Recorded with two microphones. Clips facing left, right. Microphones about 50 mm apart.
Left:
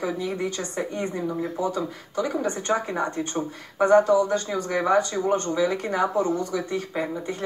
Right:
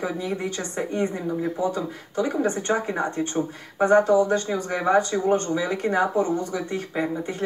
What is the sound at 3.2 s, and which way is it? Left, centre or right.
Speech, centre.